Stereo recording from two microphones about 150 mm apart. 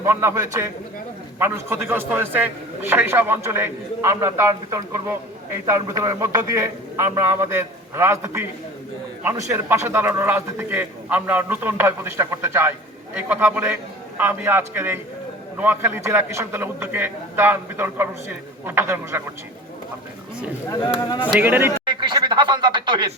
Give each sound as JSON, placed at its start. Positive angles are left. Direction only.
{"t": 0.0, "sound": "a man's voice", "side_deg": -15}
{"t": 9.5, "sound": "a man's voice", "side_deg": -15}
{"t": 20.7, "sound": "speech", "side_deg": 25}
{"t": 21.3, "sound": "a man's voice", "side_deg": -10}
{"t": 21.8, "sound": "speech", "side_deg": -30}